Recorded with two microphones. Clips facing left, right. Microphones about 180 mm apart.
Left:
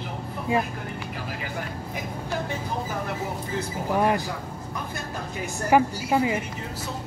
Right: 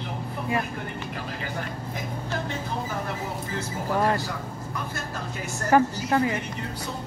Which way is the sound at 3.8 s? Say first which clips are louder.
Left 1 dB; 15° left (ahead or behind).